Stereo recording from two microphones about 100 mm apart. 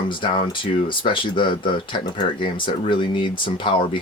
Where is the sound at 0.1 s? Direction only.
55° left (ahead or behind).